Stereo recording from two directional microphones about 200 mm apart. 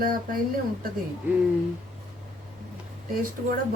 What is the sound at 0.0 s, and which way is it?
Speech, 45° right (ahead or behind).